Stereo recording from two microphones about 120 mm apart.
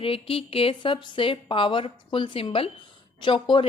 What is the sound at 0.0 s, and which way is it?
A woman's voice, 50° left (ahead or behind).